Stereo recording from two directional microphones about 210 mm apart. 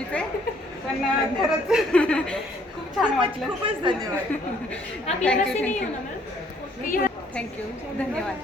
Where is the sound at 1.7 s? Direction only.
Centre (ahead or behind).